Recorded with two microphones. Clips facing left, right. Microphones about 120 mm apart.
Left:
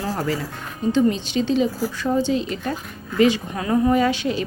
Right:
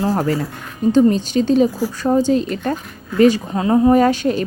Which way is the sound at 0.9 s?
45° right (ahead or behind).